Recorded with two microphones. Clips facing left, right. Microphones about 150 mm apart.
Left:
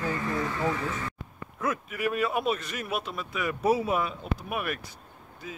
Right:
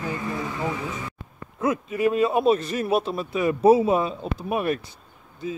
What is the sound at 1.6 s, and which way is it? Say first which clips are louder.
A man's voice: right 7 dB; 25° right (ahead or behind).